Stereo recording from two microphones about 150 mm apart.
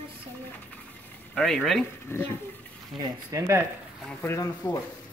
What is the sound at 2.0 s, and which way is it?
Speech, 15° left (ahead or behind).